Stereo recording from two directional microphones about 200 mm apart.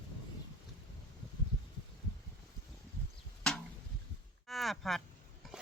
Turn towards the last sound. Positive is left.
turn(degrees=0)  # may be behind; listen again after turning